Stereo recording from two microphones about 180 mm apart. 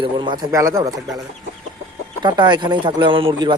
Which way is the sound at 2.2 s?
25° right (ahead or behind).